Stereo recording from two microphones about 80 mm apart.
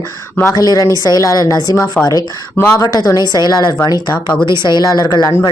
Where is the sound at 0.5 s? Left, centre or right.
Left.